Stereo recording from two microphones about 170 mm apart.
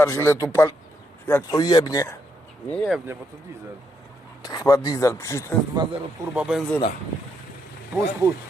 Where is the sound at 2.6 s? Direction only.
5° left (ahead or behind).